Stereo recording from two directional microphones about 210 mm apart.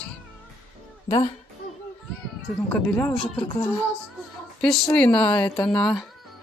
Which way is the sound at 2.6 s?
5° left (ahead or behind).